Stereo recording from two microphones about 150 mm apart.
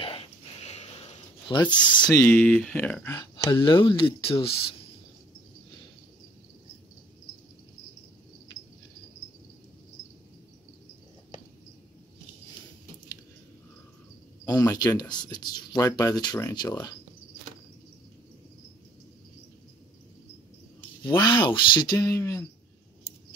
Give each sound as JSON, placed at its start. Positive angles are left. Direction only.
{"t": 0.0, "sound": "a sound", "side_deg": 35}
{"t": 1.5, "sound": "speech", "side_deg": 30}
{"t": 2.0, "sound": "speech", "side_deg": 15}
{"t": 14.5, "sound": "speech", "side_deg": 20}
{"t": 21.1, "sound": "speech", "side_deg": 25}
{"t": 21.9, "sound": "speech", "side_deg": 15}